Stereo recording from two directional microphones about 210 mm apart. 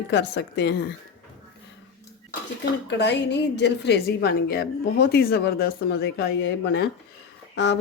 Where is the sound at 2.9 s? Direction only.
55° left (ahead or behind).